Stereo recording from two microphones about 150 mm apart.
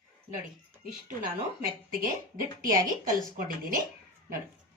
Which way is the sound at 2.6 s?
65° right (ahead or behind).